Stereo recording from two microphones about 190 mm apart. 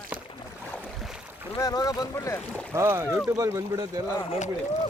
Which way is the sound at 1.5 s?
20° left (ahead or behind).